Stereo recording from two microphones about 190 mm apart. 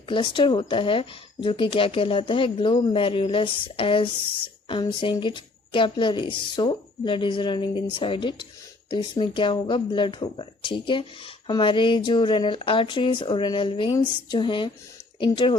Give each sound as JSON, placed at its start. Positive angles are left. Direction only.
{"t": 0.1, "sound": "speech", "side_deg": 25}